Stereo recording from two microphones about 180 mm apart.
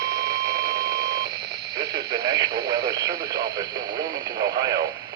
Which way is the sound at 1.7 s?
20° right (ahead or behind).